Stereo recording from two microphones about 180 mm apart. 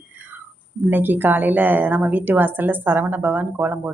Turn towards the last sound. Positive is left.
turn(degrees=-10)  # may be behind; listen again after turning